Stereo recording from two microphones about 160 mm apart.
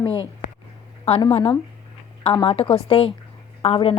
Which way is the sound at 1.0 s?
35° left (ahead or behind).